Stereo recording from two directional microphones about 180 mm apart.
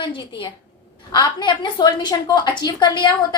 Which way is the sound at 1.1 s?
25° left (ahead or behind).